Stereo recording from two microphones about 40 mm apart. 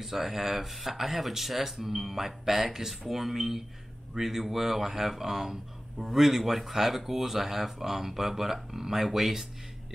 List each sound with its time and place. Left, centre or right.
0.0 s speech: centre